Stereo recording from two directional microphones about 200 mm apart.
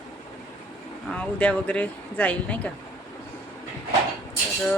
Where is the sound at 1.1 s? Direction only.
5° left (ahead or behind).